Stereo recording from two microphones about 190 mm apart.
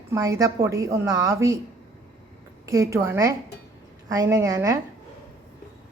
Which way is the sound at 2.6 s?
15° right (ahead or behind).